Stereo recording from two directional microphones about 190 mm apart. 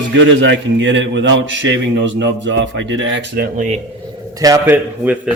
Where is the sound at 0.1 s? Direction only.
70° right (ahead or behind).